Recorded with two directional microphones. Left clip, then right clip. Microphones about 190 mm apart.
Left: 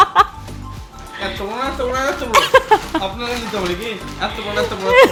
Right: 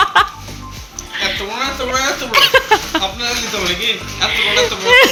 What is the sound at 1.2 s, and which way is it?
Music, 5° left (ahead or behind).